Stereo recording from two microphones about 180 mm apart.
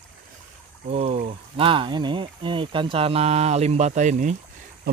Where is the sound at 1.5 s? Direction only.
30° right (ahead or behind).